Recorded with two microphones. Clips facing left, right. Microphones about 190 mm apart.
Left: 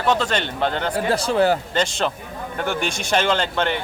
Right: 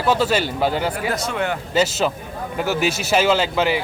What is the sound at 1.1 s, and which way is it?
Speech, 30° left (ahead or behind).